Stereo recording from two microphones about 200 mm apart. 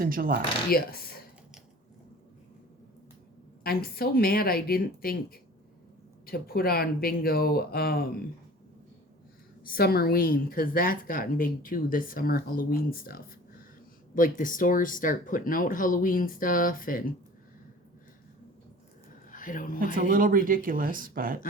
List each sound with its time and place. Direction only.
0.0 s speech: 45° right (ahead or behind)
0.7 s a woman's voice: 50° left (ahead or behind)
3.6 s a woman's voice: 50° left (ahead or behind)
9.6 s a woman's voice: 50° left (ahead or behind)
19.3 s speech: 40° left (ahead or behind)
20.0 s speech: 45° right (ahead or behind)